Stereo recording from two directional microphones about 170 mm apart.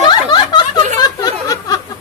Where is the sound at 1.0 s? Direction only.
20° left (ahead or behind).